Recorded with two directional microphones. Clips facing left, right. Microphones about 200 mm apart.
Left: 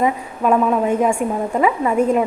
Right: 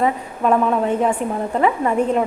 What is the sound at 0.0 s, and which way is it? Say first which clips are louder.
A woman's voice: left 1 dB; 5° left (ahead or behind).